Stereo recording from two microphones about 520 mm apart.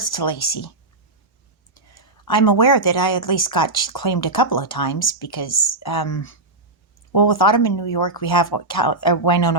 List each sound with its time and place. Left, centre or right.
0.0 s speech: left
2.2 s speech: left